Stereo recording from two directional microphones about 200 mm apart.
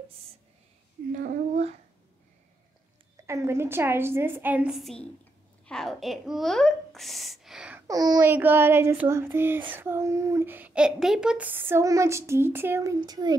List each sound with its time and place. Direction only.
1.1 s a sound: 40° right (ahead or behind)
3.3 s a child's voice: 15° right (ahead or behind)
7.8 s a child's voice: 20° right (ahead or behind)